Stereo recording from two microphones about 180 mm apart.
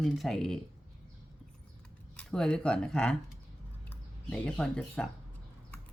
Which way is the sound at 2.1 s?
5° left (ahead or behind).